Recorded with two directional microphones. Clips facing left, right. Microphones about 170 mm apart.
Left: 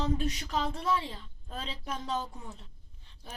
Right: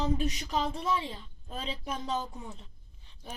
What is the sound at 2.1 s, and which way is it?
Speech, 5° right (ahead or behind).